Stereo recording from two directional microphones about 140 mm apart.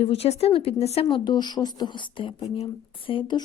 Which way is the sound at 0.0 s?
45° left (ahead or behind).